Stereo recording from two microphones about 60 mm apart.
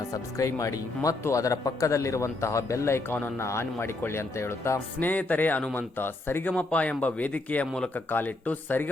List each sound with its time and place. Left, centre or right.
0.1 s a man's voice: left
4.9 s speech: left
6.5 s speech: left